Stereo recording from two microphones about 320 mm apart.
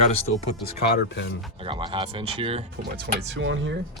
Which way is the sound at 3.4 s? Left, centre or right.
Right.